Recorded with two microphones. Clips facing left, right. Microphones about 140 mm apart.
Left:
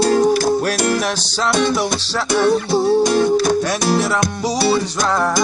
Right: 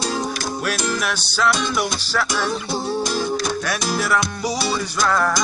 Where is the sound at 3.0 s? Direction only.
55° left (ahead or behind).